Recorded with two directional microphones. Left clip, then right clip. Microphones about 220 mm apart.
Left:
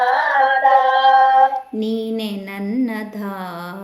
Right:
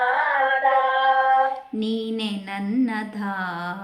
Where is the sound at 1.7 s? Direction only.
5° right (ahead or behind).